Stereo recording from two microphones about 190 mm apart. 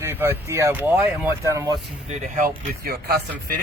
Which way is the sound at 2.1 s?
45° right (ahead or behind).